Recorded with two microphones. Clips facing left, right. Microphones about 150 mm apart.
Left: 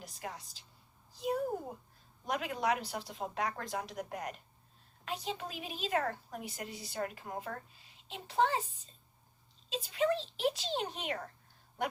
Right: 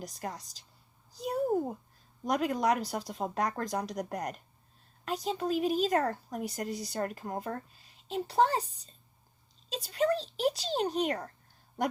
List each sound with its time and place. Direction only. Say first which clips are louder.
0.0 s a woman's voice: right 5 dB; 40° right (ahead or behind)
1.1 s a sound: right 5 dB; 40° right (ahead or behind)
2.2 s a woman's voice: right 5 dB; 40° right (ahead or behind)